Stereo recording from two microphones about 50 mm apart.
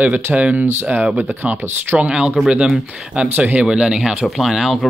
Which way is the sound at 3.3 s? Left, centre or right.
Right.